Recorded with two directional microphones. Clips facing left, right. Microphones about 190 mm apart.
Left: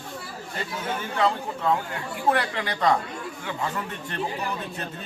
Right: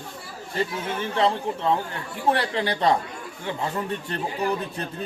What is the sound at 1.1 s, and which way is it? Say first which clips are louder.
Speech: right 2 dB; 30° right (ahead or behind).